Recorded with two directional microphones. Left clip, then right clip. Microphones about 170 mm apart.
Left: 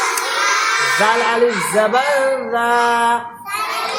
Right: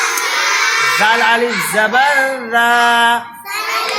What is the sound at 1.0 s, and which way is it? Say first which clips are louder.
Music: right 2 dB; 15° left (ahead or behind).